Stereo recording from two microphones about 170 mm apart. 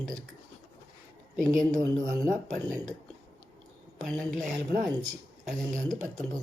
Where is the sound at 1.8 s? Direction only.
20° right (ahead or behind).